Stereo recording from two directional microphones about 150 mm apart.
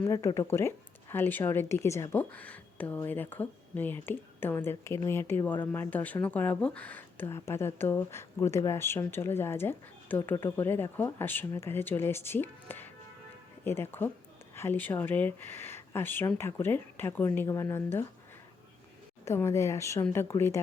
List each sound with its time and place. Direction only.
0.0 s a woman's voice: 20° left (ahead or behind)
19.2 s a woman's voice: 20° left (ahead or behind)